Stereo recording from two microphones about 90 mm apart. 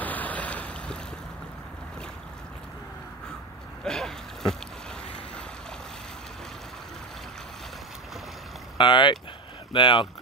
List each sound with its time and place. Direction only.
0.0 s boat: 20° left (ahead or behind)
3.8 s a sound: 5° left (ahead or behind)
8.7 s speech: 60° left (ahead or behind)